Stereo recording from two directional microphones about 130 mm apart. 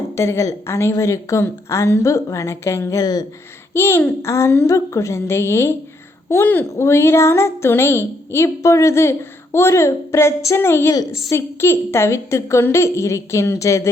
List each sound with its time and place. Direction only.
0.2 s speech: 20° left (ahead or behind)
3.8 s speech: 20° left (ahead or behind)